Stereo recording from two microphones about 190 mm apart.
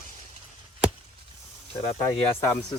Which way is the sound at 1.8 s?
20° left (ahead or behind).